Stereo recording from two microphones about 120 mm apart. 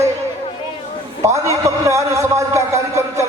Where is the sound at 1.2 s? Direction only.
25° right (ahead or behind).